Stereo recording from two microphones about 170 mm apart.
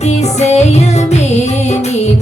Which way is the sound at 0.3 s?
40° left (ahead or behind).